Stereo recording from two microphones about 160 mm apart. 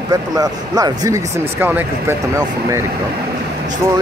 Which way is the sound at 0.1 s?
25° right (ahead or behind).